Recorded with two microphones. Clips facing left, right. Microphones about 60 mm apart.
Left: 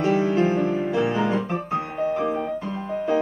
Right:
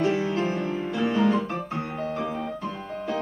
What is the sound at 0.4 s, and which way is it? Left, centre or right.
Music, left.